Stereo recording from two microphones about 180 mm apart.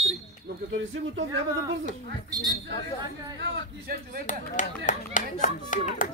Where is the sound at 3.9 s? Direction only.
55° right (ahead or behind).